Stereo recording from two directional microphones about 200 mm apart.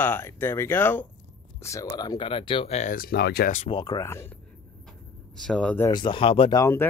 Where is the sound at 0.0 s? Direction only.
10° left (ahead or behind); by 3.5 s 55° left (ahead or behind).